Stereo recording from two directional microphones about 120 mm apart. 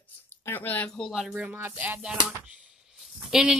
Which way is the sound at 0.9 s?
Centre (ahead or behind).